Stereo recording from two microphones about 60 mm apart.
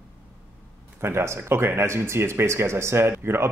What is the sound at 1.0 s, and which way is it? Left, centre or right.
A man's voice, right.